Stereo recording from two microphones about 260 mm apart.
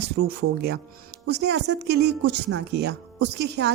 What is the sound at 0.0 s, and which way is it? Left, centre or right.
Speech, right.